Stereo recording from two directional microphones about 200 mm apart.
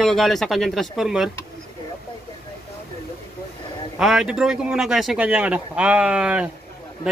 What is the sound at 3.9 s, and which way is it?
Speech, 5° right (ahead or behind).